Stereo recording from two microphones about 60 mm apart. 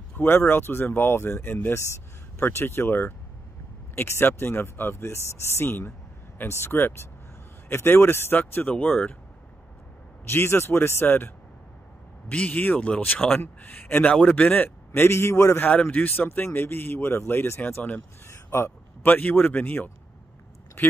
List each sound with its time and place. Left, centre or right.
0.2 s speech: left
2.4 s speech: left
5.9 s a sound: left
6.5 s a man's voice: left
10.3 s speech: left
12.3 s speech: left
13.4 s speech: left
14.2 s speech: left
14.9 s a man's voice: left
15.7 s speech: left
16.3 s speech: left
18.2 s a sound: left
19.1 s speech: left